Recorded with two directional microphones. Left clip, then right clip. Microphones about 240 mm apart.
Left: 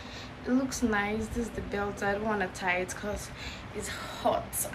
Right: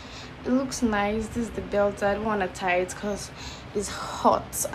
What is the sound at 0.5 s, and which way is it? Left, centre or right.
Speech, centre.